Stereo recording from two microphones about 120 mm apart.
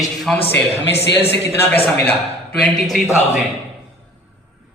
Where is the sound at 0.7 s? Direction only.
20° left (ahead or behind).